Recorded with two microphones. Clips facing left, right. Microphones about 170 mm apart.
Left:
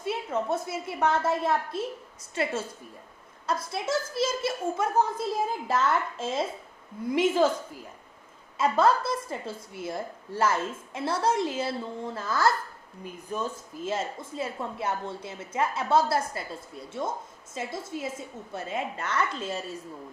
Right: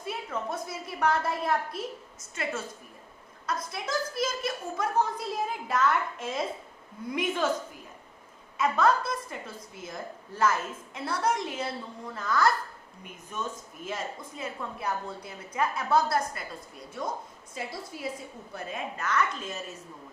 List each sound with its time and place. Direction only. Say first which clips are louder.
0.0 s speech: left 5 dB; 25° left (ahead or behind)